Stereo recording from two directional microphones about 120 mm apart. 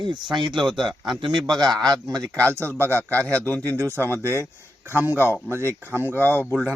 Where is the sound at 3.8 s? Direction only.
20° right (ahead or behind).